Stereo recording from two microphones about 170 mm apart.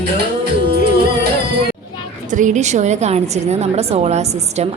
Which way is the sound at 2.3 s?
45° right (ahead or behind).